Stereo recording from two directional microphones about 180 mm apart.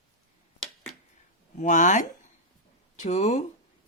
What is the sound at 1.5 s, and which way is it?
Speech, 45° left (ahead or behind).